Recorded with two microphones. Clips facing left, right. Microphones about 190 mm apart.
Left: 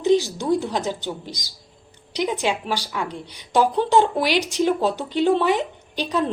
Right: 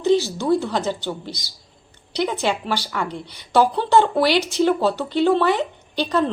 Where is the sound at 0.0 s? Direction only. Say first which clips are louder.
Even; 15° left (ahead or behind).